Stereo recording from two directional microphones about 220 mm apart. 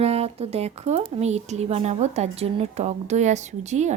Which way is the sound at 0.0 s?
25° right (ahead or behind).